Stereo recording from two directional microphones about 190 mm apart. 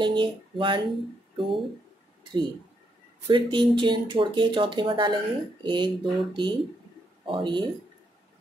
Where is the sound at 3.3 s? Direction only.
25° right (ahead or behind).